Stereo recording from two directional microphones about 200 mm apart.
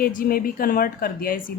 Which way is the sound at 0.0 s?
45° left (ahead or behind).